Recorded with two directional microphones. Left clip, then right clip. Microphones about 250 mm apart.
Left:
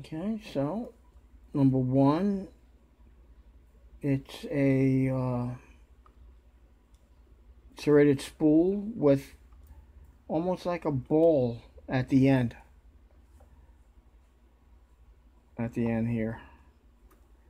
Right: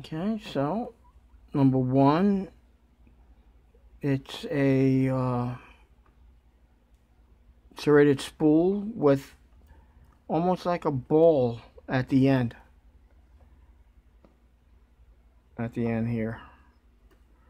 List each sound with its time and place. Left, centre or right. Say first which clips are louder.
0.0 s speech: right 3 dB; centre
4.0 s speech: right 2 dB; centre
7.7 s speech: right 2 dB; centre
15.5 s speech: right 1 dB; centre